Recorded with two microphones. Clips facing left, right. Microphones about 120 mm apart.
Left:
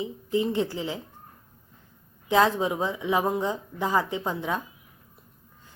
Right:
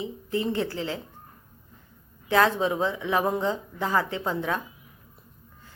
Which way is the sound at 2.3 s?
15° left (ahead or behind).